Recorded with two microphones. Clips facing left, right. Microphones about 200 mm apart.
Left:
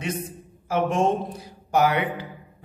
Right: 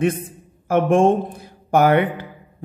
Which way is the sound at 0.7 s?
55° right (ahead or behind).